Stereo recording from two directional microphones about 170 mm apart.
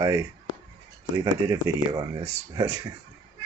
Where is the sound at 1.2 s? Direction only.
20° right (ahead or behind).